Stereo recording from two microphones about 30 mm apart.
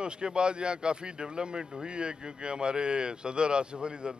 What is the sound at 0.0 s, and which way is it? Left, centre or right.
Speech, right.